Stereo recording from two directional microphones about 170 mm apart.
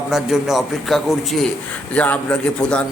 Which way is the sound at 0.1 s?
Centre (ahead or behind).